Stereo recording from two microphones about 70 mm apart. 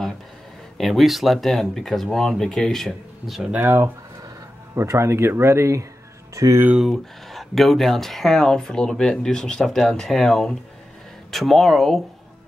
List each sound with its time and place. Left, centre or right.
0.7 s speech: centre
3.5 s speech: right
4.7 s speech: right
6.8 s speech: centre